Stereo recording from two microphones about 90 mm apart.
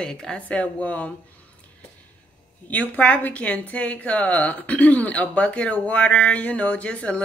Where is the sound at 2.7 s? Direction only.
15° left (ahead or behind).